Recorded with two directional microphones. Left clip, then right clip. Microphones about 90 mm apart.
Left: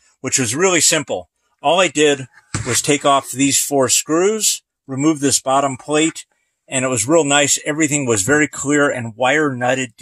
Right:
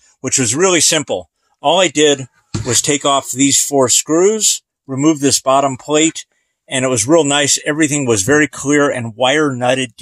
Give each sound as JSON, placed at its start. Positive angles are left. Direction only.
{"t": 0.3, "sound": "speech", "side_deg": -15}
{"t": 6.7, "sound": "speech", "side_deg": -25}